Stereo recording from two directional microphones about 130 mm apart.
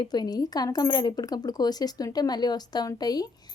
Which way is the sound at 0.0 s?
30° left (ahead or behind).